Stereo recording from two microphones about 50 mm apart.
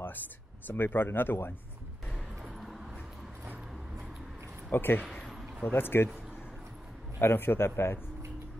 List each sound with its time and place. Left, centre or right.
0.7 s a man's voice: left
2.6 s a sound: centre
4.6 s a man's voice: left
7.2 s a man's voice: left